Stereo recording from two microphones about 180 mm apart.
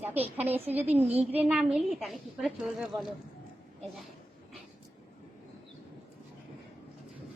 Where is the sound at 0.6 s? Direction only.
35° right (ahead or behind).